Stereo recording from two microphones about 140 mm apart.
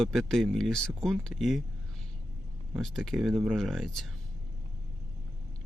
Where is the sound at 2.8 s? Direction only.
Centre (ahead or behind).